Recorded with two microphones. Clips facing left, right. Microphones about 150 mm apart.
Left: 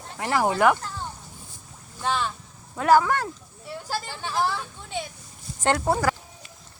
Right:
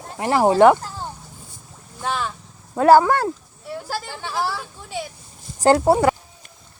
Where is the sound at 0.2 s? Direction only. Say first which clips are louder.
Right 7 dB; 25° right (ahead or behind).